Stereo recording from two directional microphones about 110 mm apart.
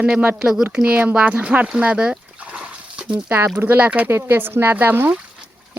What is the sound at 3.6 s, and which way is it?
Speech, 15° right (ahead or behind).